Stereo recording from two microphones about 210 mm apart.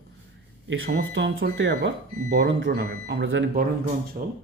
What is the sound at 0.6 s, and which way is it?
Speech, 55° right (ahead or behind).